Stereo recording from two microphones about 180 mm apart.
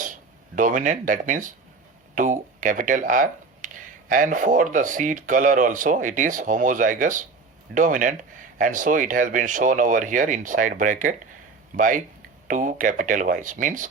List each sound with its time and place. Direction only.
0.0 s speech: 45° right (ahead or behind)